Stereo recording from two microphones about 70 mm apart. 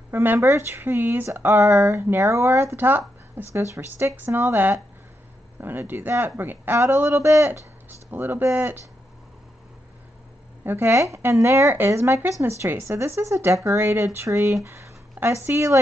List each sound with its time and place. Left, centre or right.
0.1 s speech: right
8.1 s speech: right
10.6 s speech: right